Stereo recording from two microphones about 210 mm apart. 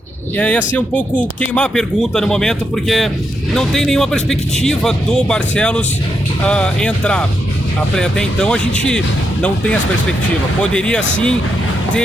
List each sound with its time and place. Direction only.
0.3 s speech: 5° left (ahead or behind)